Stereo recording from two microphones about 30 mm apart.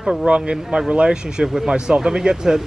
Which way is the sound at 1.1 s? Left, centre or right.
Right.